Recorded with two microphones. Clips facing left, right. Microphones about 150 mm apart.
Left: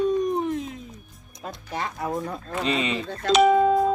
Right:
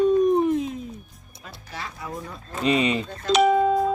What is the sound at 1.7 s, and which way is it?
Music, 50° left (ahead or behind).